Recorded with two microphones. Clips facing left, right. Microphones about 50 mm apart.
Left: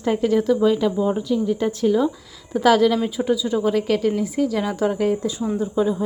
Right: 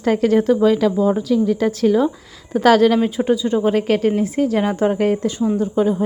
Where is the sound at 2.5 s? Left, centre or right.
Right.